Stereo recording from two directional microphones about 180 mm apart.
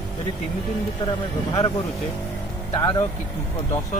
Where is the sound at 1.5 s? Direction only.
25° left (ahead or behind).